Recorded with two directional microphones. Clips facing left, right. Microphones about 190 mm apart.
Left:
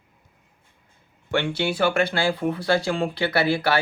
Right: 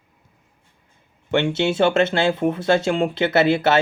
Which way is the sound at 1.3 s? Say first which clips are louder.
Right 5 dB; 20° right (ahead or behind).